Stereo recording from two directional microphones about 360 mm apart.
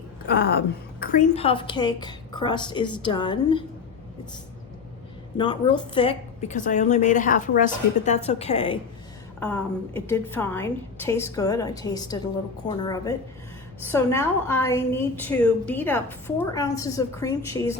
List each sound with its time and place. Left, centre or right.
0.3 s a woman's voice: left
5.4 s a woman's voice: centre
9.4 s a woman's voice: centre